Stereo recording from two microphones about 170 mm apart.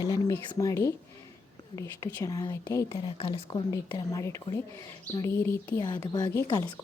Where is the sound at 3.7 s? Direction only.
20° left (ahead or behind).